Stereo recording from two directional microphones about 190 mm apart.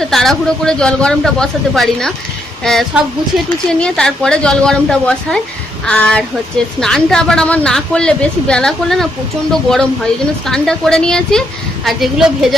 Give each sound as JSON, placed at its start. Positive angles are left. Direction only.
{"t": 0.0, "sound": "a woman's voice", "side_deg": 0}